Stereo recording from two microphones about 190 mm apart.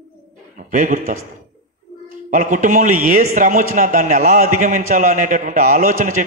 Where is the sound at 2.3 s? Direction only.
40° right (ahead or behind).